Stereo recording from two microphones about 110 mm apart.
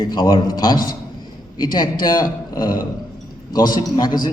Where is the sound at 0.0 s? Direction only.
40° left (ahead or behind).